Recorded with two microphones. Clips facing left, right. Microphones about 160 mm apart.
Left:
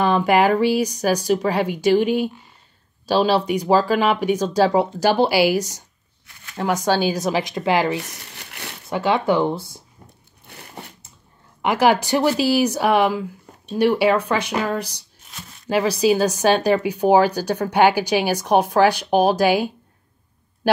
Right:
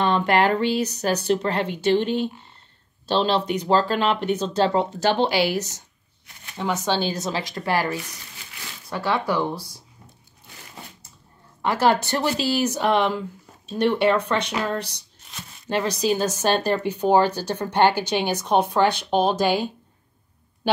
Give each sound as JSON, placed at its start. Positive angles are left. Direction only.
{"t": 0.0, "sound": "speech", "side_deg": 10}
{"t": 8.0, "sound": "crumpling", "side_deg": 65}
{"t": 8.8, "sound": "speech", "side_deg": 20}
{"t": 10.4, "sound": "crumpling", "side_deg": 60}
{"t": 11.6, "sound": "speech", "side_deg": 15}